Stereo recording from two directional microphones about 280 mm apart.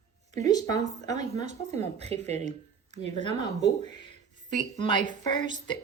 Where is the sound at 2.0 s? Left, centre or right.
Right.